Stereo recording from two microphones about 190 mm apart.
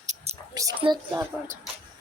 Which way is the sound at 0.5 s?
20° right (ahead or behind).